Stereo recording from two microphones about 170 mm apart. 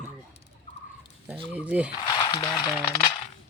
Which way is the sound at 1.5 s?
10° right (ahead or behind).